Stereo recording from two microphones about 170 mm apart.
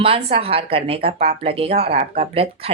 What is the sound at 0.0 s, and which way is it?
Speech, 35° right (ahead or behind).